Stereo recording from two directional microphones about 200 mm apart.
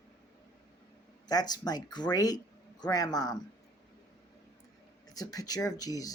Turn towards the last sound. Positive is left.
turn(degrees=20)  # may be behind; listen again after turning